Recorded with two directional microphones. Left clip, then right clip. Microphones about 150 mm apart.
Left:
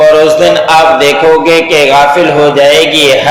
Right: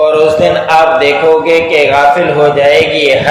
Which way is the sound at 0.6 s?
35° left (ahead or behind).